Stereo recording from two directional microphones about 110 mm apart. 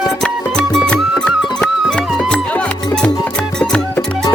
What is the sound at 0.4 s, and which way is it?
Music, 10° left (ahead or behind).